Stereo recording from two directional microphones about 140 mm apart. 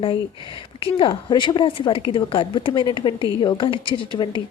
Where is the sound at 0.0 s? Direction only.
40° left (ahead or behind).